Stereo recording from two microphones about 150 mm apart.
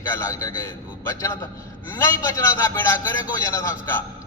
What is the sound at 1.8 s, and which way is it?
A man's voice, 15° left (ahead or behind).